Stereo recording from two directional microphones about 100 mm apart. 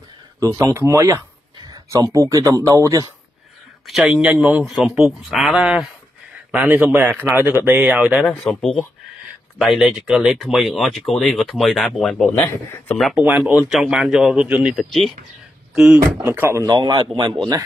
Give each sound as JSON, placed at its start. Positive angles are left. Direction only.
{"t": 0.4, "sound": "speech", "side_deg": -35}
{"t": 1.6, "sound": "a sound", "side_deg": -45}
{"t": 2.0, "sound": "speech", "side_deg": -30}
{"t": 3.8, "sound": "a man's voice", "side_deg": -5}
{"t": 4.6, "sound": "speech", "side_deg": 0}
{"t": 6.5, "sound": "speech", "side_deg": -20}
{"t": 12.3, "sound": "a man's voice", "side_deg": 25}
{"t": 13.1, "sound": "a man's voice", "side_deg": -15}
{"t": 14.8, "sound": "a man's voice", "side_deg": 0}
{"t": 16.3, "sound": "speech", "side_deg": -25}
{"t": 16.6, "sound": "a man's voice", "side_deg": -45}